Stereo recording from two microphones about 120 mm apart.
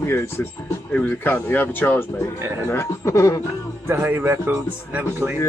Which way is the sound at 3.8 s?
20° right (ahead or behind).